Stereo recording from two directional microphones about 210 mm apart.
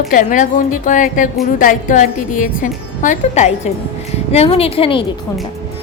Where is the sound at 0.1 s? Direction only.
40° left (ahead or behind).